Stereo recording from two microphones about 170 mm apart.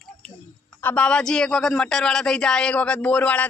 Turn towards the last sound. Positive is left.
turn(degrees=10)  # may be behind; listen again after turning